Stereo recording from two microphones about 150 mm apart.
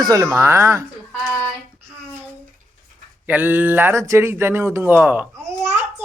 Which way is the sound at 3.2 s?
10° right (ahead or behind).